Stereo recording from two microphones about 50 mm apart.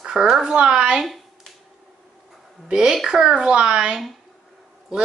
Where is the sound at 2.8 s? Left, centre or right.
Centre.